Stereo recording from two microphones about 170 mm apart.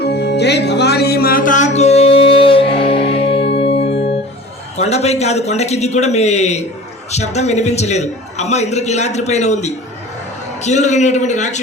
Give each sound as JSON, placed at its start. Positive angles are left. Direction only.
{"t": 0.0, "sound": "music", "side_deg": 75}
{"t": 4.8, "sound": "a man's voice", "side_deg": 40}